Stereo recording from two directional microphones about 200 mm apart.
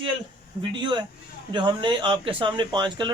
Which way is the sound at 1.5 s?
25° right (ahead or behind).